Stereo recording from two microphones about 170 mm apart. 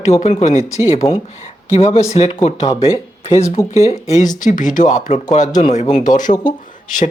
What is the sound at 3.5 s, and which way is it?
Speech, 40° left (ahead or behind).